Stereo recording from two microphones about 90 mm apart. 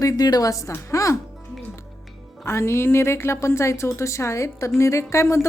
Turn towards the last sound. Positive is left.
turn(degrees=30)  # may be behind; listen again after turning